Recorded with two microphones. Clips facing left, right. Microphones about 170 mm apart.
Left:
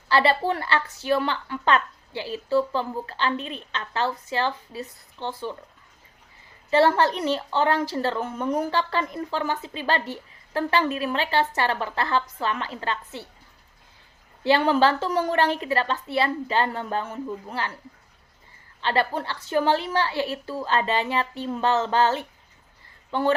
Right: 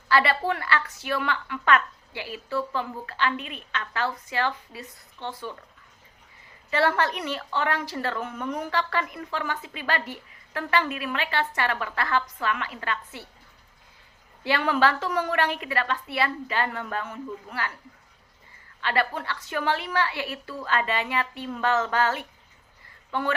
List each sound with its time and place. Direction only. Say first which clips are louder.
0.1 s speech: left 2 dB; 30° left (ahead or behind)
6.7 s speech: left 5 dB; 30° left (ahead or behind)
14.4 s speech: left 4 dB; 30° left (ahead or behind)
18.8 s speech: left 2 dB; 30° left (ahead or behind)